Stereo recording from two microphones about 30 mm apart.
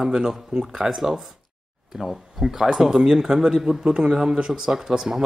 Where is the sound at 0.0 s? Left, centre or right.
Right.